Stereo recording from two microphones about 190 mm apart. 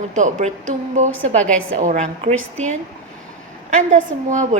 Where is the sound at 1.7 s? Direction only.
40° right (ahead or behind).